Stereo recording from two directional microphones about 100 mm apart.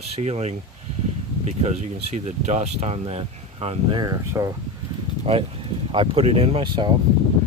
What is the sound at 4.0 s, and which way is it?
Speech, 40° right (ahead or behind).